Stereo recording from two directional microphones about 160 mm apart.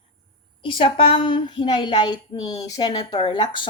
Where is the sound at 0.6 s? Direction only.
30° left (ahead or behind).